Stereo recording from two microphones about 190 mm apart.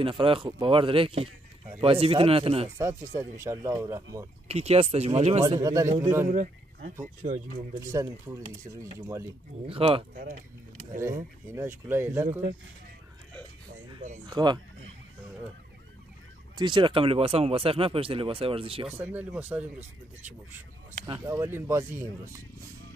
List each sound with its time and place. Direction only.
0.0 s speech: 25° right (ahead or behind)
2.8 s speech: 15° right (ahead or behind)
4.5 s speech: 35° right (ahead or behind)
5.6 s speech: 15° right (ahead or behind)
6.2 s speech: 40° right (ahead or behind)
7.8 s speech: 15° right (ahead or behind)
9.7 s speech: 30° right (ahead or behind)
10.2 s speech: 40° right (ahead or behind)
11.0 s speech: 15° right (ahead or behind)
14.2 s speech: 25° right (ahead or behind)
16.5 s speech: 25° right (ahead or behind)
18.9 s speech: 10° right (ahead or behind)
21.1 s speech: 15° right (ahead or behind)